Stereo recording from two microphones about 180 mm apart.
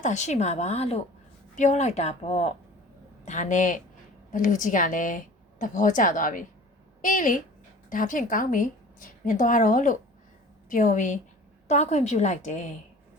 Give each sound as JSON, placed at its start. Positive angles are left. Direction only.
{"t": 0.0, "sound": "a woman's voice", "side_deg": 40}